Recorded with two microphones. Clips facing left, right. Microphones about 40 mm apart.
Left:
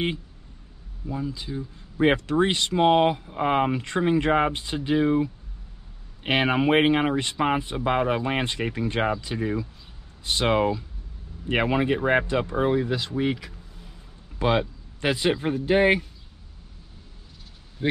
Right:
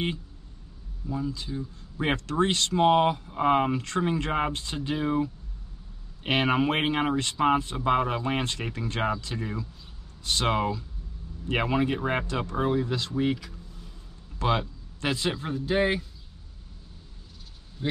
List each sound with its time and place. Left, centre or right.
1.1 s speech: centre
15.3 s a man's voice: left